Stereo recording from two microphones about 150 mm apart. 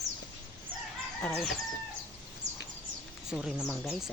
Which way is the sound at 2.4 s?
50° right (ahead or behind).